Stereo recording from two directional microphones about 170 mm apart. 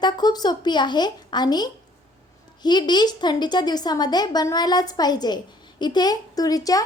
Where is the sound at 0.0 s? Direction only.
25° left (ahead or behind).